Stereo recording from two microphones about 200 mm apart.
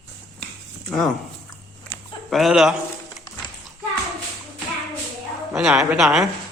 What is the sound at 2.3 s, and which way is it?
Speech, centre (ahead or behind).